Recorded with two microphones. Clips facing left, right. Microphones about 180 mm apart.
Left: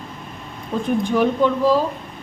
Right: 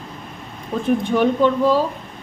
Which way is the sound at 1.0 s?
Centre (ahead or behind).